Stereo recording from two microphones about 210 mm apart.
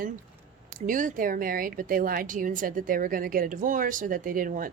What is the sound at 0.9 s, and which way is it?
A woman's voice, 40° right (ahead or behind).